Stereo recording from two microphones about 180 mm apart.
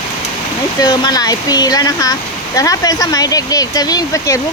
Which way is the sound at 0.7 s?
20° left (ahead or behind).